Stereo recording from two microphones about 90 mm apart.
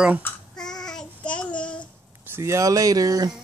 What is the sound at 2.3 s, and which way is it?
Speech, 30° right (ahead or behind).